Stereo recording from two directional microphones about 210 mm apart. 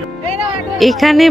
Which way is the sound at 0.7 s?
Centre (ahead or behind).